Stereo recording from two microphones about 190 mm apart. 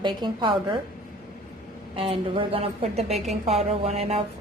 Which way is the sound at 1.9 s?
30° right (ahead or behind).